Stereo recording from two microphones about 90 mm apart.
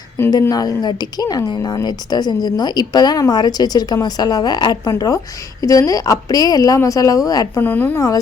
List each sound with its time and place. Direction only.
0.4 s a woman's voice: 45° left (ahead or behind)
7.6 s a woman's voice: 20° left (ahead or behind)
7.9 s a woman's voice: 40° left (ahead or behind)